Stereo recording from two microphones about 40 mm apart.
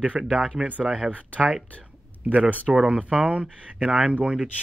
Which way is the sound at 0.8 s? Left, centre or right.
Centre.